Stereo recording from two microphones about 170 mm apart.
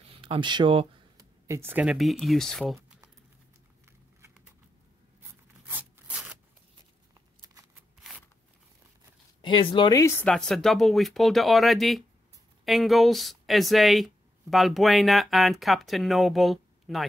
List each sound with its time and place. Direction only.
0.1 s a sound: 30° right (ahead or behind)
1.5 s speech: 10° right (ahead or behind)
5.7 s rub: 10° right (ahead or behind)
9.4 s speech: 30° left (ahead or behind)
10.2 s speech: 5° left (ahead or behind)